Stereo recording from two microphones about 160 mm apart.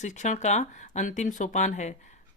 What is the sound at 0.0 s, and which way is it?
Speech, 50° left (ahead or behind).